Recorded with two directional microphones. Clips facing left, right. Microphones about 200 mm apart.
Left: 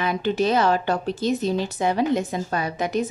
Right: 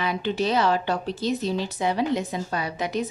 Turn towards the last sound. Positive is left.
turn(degrees=50)  # may be behind; listen again after turning